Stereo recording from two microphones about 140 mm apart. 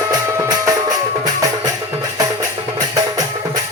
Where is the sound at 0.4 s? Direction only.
25° right (ahead or behind).